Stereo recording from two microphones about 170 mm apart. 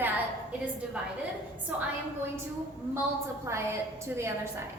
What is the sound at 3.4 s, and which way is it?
Speech, 15° right (ahead or behind).